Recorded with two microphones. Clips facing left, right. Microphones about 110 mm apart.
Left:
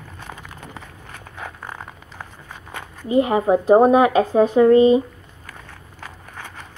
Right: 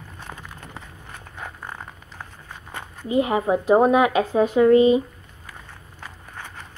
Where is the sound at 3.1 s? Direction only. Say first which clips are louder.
Left 4 dB; 30° left (ahead or behind).